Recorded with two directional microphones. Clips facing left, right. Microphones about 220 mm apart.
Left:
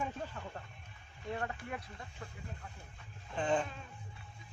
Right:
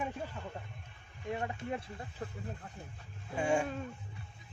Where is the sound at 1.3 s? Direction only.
20° right (ahead or behind).